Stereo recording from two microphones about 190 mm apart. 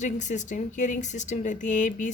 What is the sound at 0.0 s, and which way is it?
Speech, 40° left (ahead or behind).